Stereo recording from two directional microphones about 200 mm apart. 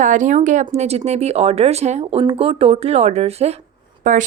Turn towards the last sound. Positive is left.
turn(degrees=-40)  # may be behind; listen again after turning